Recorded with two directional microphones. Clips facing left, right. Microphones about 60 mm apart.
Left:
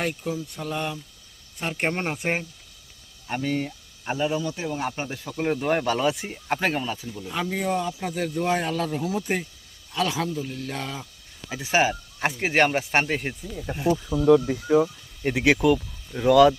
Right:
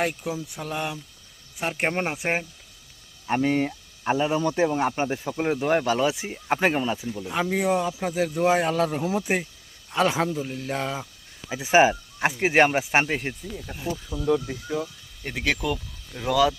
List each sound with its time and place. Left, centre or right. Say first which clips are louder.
0.0 s speech: right 1 dB; centre
3.2 s a man's voice: right 4 dB; right
4.4 s a man's voice: right 6 dB; right
5.3 s speech: left 1 dB; centre
8.1 s speech: right 4 dB; centre
9.0 s a man's voice: right 2 dB; right
9.9 s a man's voice: right 3 dB; right
10.5 s a man's voice: right 3 dB; centre
12.2 s speech: right 2 dB; centre
13.6 s speech: left 6 dB; left
15.2 s speech: left 7 dB; centre